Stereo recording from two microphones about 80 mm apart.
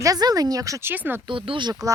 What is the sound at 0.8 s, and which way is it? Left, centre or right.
Speech, right.